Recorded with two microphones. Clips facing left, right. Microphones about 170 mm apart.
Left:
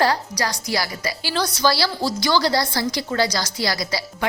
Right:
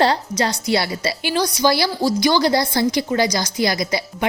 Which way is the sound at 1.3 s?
15° right (ahead or behind).